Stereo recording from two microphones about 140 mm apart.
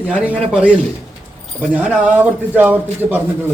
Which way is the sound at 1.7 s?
10° right (ahead or behind).